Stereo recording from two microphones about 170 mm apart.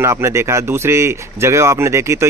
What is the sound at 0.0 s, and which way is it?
Speech, 15° right (ahead or behind).